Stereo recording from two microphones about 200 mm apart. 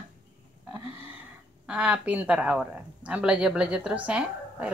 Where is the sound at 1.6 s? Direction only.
5° right (ahead or behind).